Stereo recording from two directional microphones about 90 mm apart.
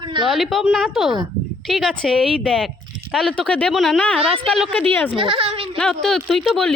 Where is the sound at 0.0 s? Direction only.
60° right (ahead or behind).